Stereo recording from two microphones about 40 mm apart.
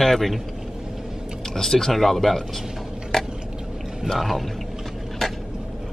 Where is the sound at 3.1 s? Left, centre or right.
Centre.